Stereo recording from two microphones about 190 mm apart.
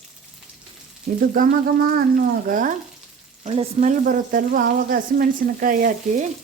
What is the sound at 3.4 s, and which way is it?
Frying, 30° right (ahead or behind).